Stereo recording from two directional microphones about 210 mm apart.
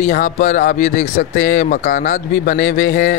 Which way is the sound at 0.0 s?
40° left (ahead or behind).